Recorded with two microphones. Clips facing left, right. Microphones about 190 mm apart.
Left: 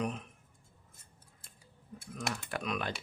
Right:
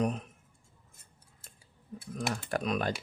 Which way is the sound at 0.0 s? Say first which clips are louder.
Right 5 dB; 40° right (ahead or behind).